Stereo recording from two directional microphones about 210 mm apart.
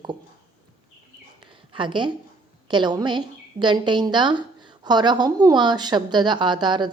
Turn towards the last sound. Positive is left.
turn(degrees=-20)  # may be behind; listen again after turning